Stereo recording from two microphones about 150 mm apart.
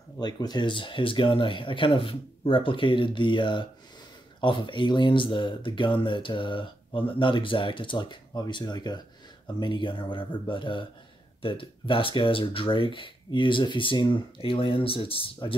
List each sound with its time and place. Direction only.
0.2 s speech: 25° left (ahead or behind)